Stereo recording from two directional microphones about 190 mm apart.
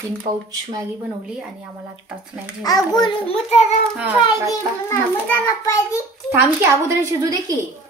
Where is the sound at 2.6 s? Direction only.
20° left (ahead or behind).